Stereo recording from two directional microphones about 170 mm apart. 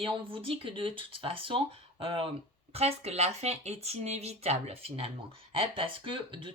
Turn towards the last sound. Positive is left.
turn(degrees=-30)  # may be behind; listen again after turning